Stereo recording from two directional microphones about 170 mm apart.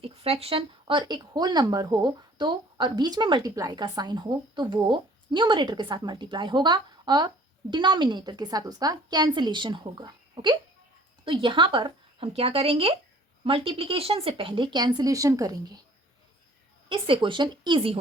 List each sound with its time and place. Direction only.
0.0 s speech: 35° right (ahead or behind)
16.9 s speech: 30° right (ahead or behind)